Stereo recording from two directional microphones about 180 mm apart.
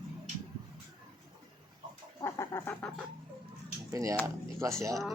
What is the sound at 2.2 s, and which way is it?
Bird, 15° left (ahead or behind).